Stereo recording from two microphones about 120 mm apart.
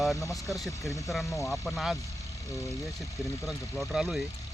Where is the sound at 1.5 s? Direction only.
5° left (ahead or behind).